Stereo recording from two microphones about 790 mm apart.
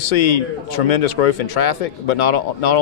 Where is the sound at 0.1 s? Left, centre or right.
Left.